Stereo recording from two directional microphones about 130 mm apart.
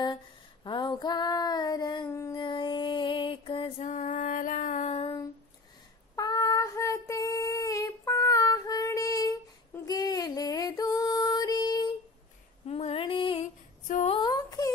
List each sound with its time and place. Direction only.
0.7 s female singing: 35° left (ahead or behind)
2.3 s music: 40° left (ahead or behind)
3.8 s female singing: 70° left (ahead or behind)
6.1 s female singing: 30° left (ahead or behind)
12.6 s female singing: 50° left (ahead or behind)
14.0 s a sound: 40° left (ahead or behind)
14.3 s a sound: 30° left (ahead or behind)